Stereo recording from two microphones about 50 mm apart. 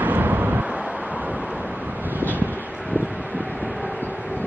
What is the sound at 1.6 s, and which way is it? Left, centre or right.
Wind, right.